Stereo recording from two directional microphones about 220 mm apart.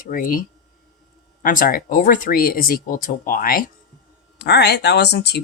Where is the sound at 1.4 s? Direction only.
40° left (ahead or behind).